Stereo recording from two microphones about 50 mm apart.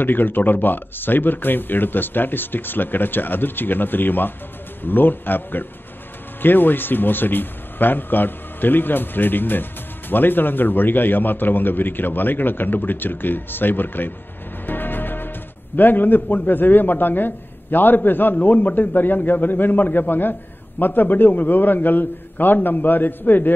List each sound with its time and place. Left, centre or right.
0.0 s a man's voice: left